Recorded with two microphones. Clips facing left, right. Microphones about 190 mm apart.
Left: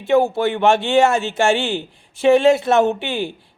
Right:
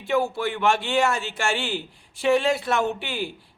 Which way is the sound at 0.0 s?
25° left (ahead or behind).